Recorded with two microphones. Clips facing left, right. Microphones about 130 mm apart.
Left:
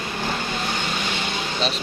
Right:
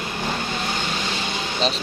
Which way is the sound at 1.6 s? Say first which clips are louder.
Right 3 dB; 35° right (ahead or behind).